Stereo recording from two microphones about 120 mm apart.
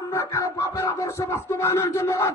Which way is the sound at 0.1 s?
20° left (ahead or behind).